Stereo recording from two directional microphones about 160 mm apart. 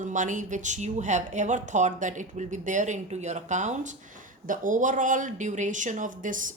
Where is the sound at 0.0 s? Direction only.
50° right (ahead or behind).